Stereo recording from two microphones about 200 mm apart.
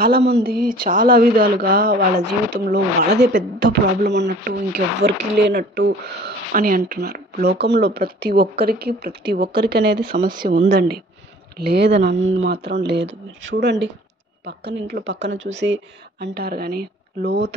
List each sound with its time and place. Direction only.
0.0 s speech: 55° right (ahead or behind)
6.5 s speech: 45° right (ahead or behind)
10.2 s speech: 45° right (ahead or behind)
11.6 s speech: 55° right (ahead or behind)